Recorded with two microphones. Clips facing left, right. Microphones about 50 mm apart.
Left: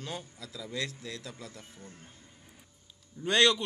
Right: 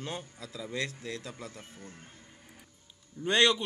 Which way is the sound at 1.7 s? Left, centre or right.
Centre.